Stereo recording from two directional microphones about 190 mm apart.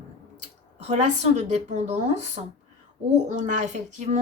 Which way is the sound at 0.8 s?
35° right (ahead or behind).